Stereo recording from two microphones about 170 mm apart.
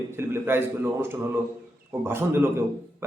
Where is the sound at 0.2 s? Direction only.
15° right (ahead or behind).